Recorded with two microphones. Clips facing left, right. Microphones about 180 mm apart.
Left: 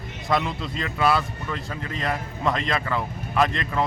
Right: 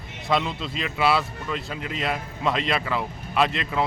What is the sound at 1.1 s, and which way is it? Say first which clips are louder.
Speech: right 1 dB; 10° right (ahead or behind).